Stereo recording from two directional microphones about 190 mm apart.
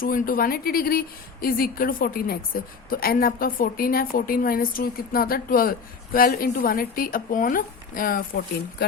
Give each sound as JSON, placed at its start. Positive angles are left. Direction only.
{"t": 0.0, "sound": "speech", "side_deg": 50}